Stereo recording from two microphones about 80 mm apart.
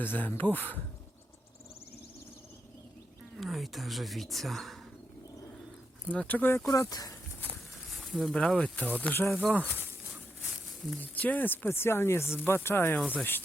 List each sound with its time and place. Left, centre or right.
0.0 s speech: left
3.3 s speech: centre
6.1 s speech: centre
6.7 s speech: left
7.5 s a sound: centre
8.4 s speech: centre
9.6 s speech: right
10.5 s a sound: centre
11.0 s speech: centre